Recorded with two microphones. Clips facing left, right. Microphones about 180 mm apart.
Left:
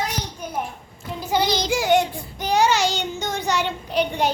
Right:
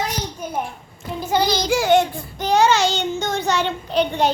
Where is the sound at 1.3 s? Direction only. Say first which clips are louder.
Right 2 dB; 20° left (ahead or behind).